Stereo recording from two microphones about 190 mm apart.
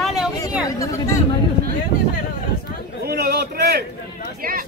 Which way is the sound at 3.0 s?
55° right (ahead or behind).